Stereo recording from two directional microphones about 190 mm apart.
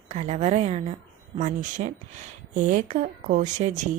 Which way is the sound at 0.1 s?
35° right (ahead or behind).